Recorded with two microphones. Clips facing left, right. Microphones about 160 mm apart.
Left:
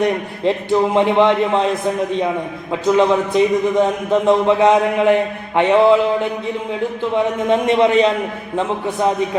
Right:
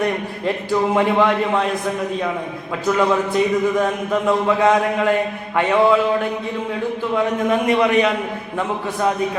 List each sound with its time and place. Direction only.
0.0 s a man's voice: 25° left (ahead or behind)
2.8 s a man's voice: 20° left (ahead or behind)
7.5 s a man's voice: 25° left (ahead or behind)